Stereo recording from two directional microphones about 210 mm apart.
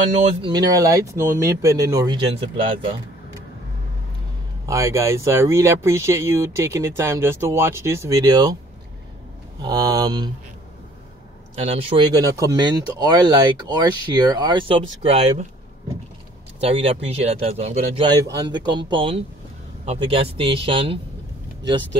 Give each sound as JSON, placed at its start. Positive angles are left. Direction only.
{"t": 0.1, "sound": "speech", "side_deg": -20}
{"t": 4.6, "sound": "speech", "side_deg": -15}
{"t": 9.6, "sound": "speech", "side_deg": -20}
{"t": 11.5, "sound": "speech", "side_deg": -30}
{"t": 16.6, "sound": "speech", "side_deg": -25}